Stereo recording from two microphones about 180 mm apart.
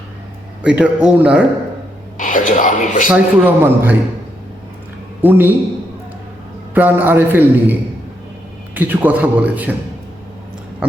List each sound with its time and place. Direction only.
0.6 s a man's voice: 5° right (ahead or behind)
2.1 s speech: 45° left (ahead or behind)
3.1 s a man's voice: 10° right (ahead or behind)
5.2 s a man's voice: 10° right (ahead or behind)
6.7 s a man's voice: 10° right (ahead or behind)